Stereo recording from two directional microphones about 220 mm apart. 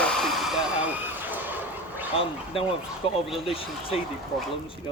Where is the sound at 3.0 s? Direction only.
25° left (ahead or behind).